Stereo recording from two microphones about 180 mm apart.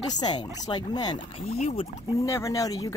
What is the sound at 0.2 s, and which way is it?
Speech, 25° left (ahead or behind).